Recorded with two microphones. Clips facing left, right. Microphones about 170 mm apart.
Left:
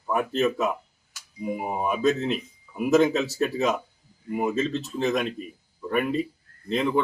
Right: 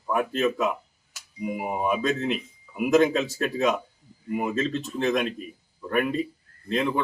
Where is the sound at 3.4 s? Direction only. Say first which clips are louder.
Even; centre (ahead or behind).